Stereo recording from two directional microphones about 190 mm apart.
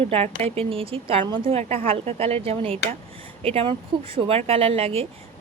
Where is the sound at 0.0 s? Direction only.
30° right (ahead or behind).